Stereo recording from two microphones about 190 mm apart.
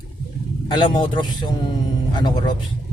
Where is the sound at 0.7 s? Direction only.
25° left (ahead or behind).